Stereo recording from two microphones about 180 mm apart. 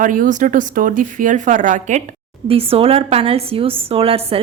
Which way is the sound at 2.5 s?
30° right (ahead or behind).